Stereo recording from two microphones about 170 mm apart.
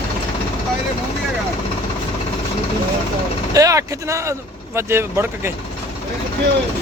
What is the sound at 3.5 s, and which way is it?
Speech, 20° right (ahead or behind).